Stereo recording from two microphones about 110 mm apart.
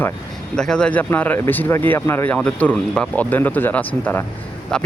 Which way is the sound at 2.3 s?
10° left (ahead or behind).